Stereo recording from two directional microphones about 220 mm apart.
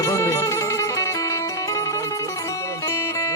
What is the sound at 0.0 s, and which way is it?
Music, 15° left (ahead or behind).